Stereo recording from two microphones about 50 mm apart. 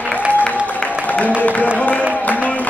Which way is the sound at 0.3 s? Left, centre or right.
Left.